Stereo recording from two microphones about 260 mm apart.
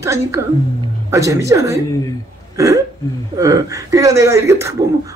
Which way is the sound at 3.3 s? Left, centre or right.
Centre.